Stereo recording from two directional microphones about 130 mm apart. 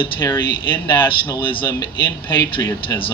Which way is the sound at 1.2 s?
40° left (ahead or behind).